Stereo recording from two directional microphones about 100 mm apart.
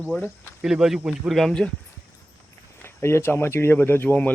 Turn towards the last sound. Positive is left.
turn(degrees=20)  # may be behind; listen again after turning